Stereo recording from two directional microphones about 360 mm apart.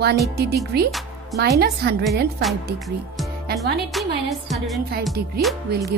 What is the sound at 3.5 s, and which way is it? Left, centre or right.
Speech, right.